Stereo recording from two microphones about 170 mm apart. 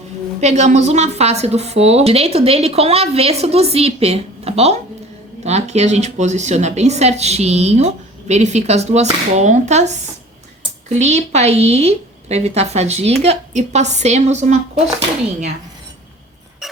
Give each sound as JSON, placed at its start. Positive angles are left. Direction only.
{"t": 0.3, "sound": "speech", "side_deg": -40}